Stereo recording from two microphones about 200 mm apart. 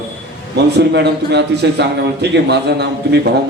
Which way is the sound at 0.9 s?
55° right (ahead or behind).